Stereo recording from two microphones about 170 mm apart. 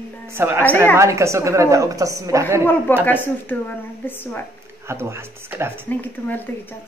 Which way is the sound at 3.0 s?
10° left (ahead or behind).